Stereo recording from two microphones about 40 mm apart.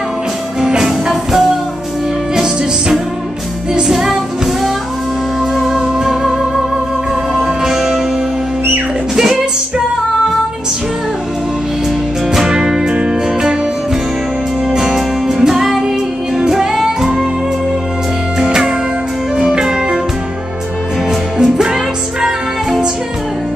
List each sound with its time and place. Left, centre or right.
0.6 s music: centre
5.6 s music: centre
9.1 s music: centre
12.3 s music: centre
14.7 s music: centre
18.4 s music: centre
21.4 s music: centre